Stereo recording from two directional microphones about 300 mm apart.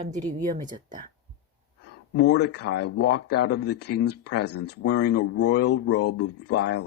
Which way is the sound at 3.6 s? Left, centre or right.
Left.